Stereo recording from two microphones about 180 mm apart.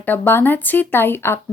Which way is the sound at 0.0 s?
10° left (ahead or behind).